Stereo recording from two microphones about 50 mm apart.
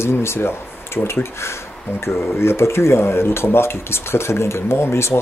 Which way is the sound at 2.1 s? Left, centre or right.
Left.